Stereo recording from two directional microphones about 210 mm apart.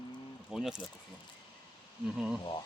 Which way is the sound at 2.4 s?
20° left (ahead or behind).